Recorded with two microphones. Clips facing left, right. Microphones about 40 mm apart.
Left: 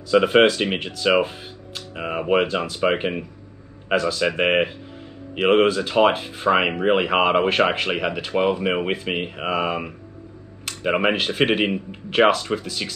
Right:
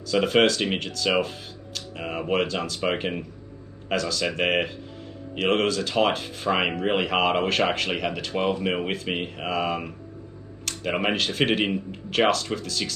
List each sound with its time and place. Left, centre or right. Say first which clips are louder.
0.1 s speech: left 5 dB; centre